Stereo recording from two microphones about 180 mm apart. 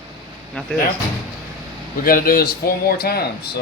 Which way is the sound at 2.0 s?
55° left (ahead or behind).